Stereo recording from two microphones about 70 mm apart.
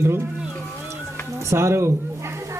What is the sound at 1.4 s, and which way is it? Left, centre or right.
Speech, right.